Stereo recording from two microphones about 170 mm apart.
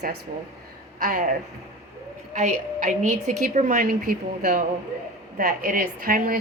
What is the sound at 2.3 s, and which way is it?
A woman's voice, 45° right (ahead or behind).